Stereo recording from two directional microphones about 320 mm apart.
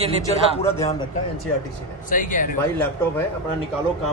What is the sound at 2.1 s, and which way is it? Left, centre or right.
Speech, left.